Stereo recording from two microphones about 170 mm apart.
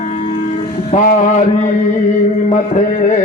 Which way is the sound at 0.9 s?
45° left (ahead or behind).